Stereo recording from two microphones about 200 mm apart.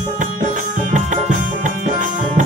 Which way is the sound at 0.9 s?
40° right (ahead or behind).